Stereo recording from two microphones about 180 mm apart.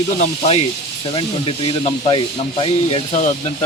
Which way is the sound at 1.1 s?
30° left (ahead or behind).